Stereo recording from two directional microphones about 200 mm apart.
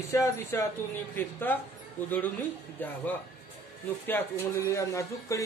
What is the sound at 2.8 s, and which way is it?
Speech, 10° left (ahead or behind).